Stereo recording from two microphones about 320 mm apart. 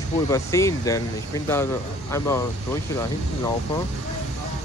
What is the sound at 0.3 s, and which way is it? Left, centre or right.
Speech, centre.